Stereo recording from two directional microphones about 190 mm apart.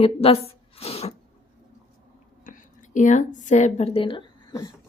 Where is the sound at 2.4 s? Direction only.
45° left (ahead or behind); by 4.7 s 20° left (ahead or behind).